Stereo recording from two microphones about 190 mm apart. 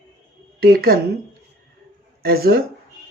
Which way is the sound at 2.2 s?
55° right (ahead or behind).